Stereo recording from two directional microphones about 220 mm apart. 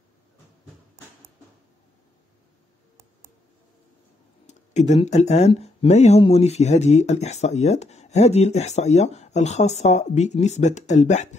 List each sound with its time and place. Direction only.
4.5 s speech: 30° left (ahead or behind)